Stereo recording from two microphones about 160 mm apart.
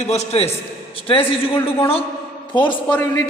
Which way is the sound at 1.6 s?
35° left (ahead or behind).